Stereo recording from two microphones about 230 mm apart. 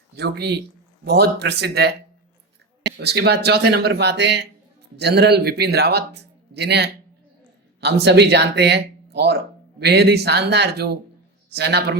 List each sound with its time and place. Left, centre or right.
0.2 s speech: right